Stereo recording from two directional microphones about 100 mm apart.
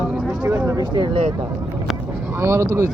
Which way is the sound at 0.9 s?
55° right (ahead or behind).